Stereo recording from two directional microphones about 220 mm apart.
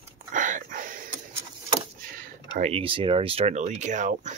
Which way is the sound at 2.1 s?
40° right (ahead or behind).